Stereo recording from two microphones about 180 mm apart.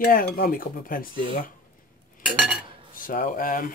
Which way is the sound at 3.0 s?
50° left (ahead or behind).